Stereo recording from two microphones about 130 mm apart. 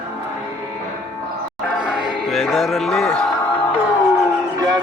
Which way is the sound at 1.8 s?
5° right (ahead or behind).